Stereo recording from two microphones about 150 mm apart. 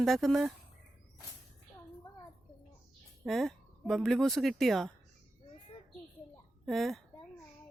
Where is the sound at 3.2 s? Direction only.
Centre (ahead or behind).